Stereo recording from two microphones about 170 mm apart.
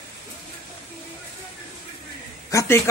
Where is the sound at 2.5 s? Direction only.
15° left (ahead or behind).